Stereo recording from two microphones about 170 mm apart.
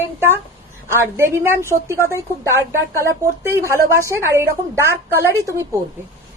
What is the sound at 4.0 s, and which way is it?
A woman's voice, 15° right (ahead or behind).